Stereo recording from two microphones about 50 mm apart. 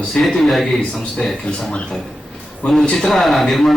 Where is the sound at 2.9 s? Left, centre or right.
Centre.